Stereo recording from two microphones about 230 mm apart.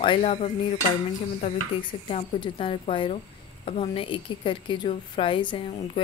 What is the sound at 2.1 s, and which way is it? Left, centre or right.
A woman's voice, left.